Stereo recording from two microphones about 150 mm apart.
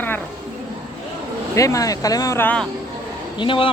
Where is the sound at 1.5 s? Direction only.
20° left (ahead or behind).